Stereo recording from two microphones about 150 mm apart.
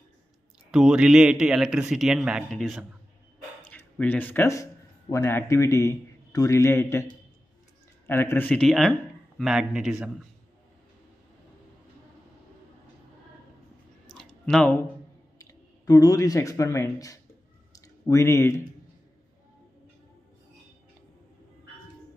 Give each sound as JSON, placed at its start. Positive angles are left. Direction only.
{"t": 0.7, "sound": "a man's voice", "side_deg": -5}
{"t": 3.7, "sound": "a man's voice", "side_deg": 10}
{"t": 8.1, "sound": "a man's voice", "side_deg": 15}
{"t": 14.0, "sound": "a sound", "side_deg": 5}
{"t": 15.3, "sound": "speech", "side_deg": 25}
{"t": 17.7, "sound": "a sound", "side_deg": 20}